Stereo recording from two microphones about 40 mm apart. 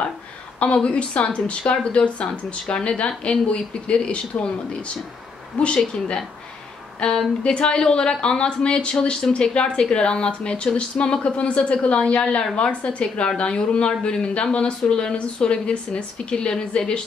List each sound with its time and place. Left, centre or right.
0.8 s speech: left
5.6 s speech: left
7.0 s speech: left